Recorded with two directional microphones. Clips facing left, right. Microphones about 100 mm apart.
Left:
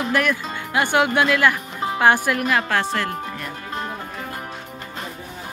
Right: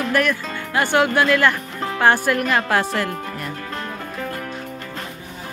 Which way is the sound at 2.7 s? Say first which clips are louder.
Right 2 dB; 10° right (ahead or behind).